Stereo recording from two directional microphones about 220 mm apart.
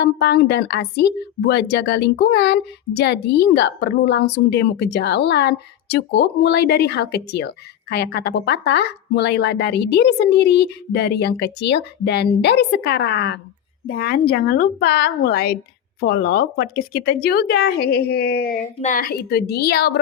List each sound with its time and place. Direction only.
0.0 s a woman's voice: 50° left (ahead or behind)